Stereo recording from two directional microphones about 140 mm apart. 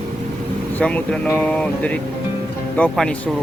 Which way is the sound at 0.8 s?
10° left (ahead or behind).